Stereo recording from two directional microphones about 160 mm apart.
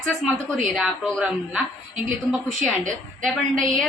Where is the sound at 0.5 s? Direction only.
Centre (ahead or behind).